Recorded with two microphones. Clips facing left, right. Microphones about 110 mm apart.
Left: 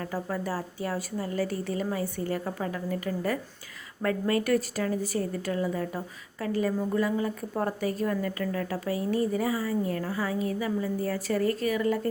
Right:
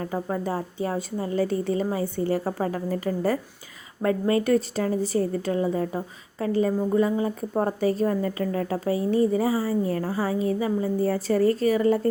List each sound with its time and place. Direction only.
0.0 s a woman's voice: 25° right (ahead or behind)